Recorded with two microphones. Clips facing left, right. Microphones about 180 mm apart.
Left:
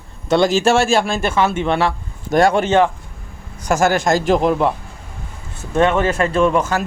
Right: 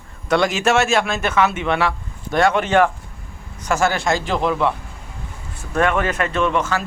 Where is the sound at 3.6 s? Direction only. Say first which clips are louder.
Left 3 dB; 40° left (ahead or behind).